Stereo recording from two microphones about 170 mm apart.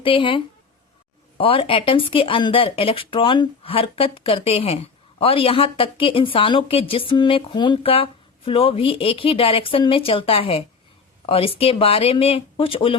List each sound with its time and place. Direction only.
0.0 s a woman's voice: 30° left (ahead or behind)